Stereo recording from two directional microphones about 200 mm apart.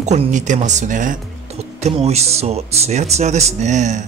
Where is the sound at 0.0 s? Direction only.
35° right (ahead or behind).